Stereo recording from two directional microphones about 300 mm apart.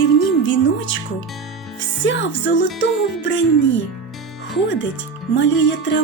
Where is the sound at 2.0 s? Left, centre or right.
Left.